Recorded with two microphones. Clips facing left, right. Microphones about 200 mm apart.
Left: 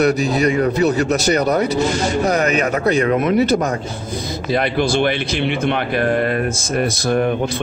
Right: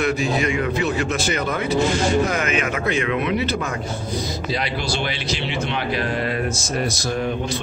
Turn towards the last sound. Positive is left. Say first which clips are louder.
# left 6 dB
turn(degrees=55)  # may be behind; listen again after turning